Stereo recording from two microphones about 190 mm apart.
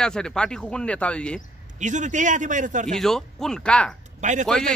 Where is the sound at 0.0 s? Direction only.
5° left (ahead or behind).